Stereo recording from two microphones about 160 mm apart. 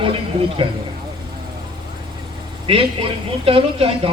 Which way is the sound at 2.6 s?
35° right (ahead or behind).